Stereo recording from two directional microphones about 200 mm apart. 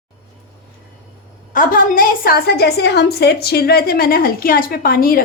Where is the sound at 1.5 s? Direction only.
45° left (ahead or behind).